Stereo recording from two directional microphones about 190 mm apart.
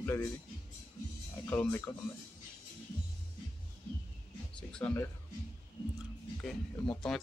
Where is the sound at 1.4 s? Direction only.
10° left (ahead or behind).